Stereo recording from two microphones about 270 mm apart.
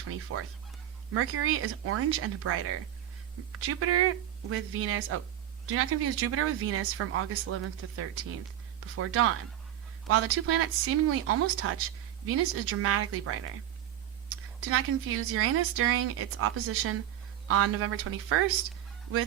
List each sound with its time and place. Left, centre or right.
0.3 s speech: right
3.7 s speech: right
14.7 s speech: right